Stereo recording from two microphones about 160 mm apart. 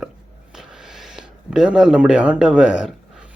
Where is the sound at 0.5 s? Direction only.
5° right (ahead or behind).